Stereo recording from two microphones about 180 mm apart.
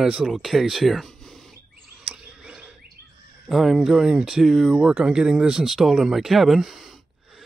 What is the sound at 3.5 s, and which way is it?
Speech, centre (ahead or behind).